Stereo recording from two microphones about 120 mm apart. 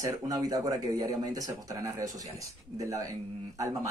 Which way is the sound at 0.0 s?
30° right (ahead or behind).